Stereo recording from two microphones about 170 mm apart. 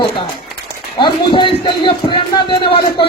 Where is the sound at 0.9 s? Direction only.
25° left (ahead or behind).